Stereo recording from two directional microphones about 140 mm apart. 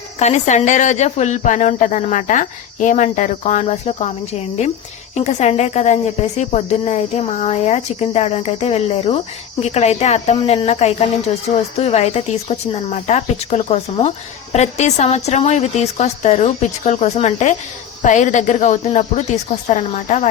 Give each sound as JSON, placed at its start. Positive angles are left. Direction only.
{"t": 0.2, "sound": "speech", "side_deg": 55}